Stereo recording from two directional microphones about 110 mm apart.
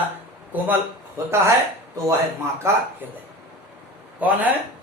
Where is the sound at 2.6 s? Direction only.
25° right (ahead or behind).